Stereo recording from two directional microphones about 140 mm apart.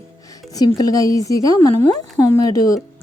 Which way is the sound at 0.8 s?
25° left (ahead or behind).